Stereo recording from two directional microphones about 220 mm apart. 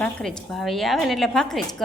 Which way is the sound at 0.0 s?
5° left (ahead or behind).